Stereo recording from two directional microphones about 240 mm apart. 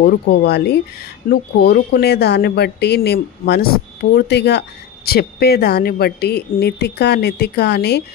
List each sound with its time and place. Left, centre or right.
0.0 s speech: left